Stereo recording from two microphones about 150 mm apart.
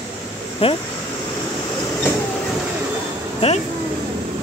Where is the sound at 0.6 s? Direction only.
40° left (ahead or behind).